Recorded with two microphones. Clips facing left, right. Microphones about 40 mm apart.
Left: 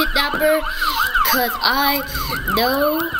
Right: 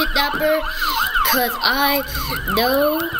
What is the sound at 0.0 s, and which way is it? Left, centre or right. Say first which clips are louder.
Speech: left 1 dB; centre.